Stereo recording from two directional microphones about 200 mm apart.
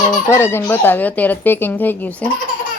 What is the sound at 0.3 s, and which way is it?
Speech, 10° left (ahead or behind).